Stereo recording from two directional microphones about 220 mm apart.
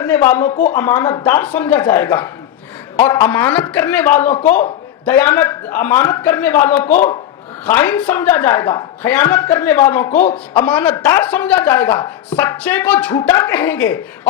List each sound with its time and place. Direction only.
0.0 s speech: 10° left (ahead or behind)
6.9 s speech: 35° left (ahead or behind)
7.7 s speech: 10° left (ahead or behind)
10.2 s a man's voice: 25° left (ahead or behind)
10.7 s speech: 10° left (ahead or behind)